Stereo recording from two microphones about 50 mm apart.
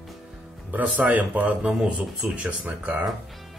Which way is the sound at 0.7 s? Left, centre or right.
Right.